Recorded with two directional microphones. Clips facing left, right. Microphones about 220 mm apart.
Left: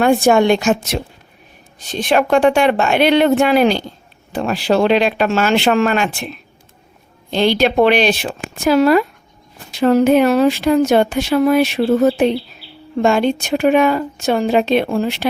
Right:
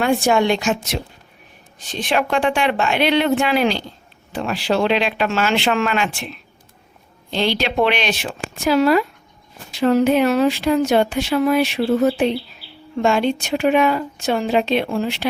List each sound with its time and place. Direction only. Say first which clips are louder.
0.0 s speech: left 5 dB; 50° left (ahead or behind)